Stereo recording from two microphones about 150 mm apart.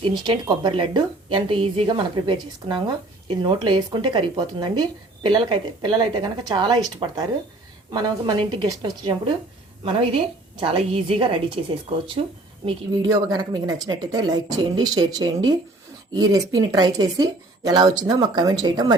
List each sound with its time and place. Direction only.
0.0 s a woman's voice: 30° right (ahead or behind)
10.6 s a woman's voice: 40° right (ahead or behind)
12.6 s a woman's voice: 30° right (ahead or behind)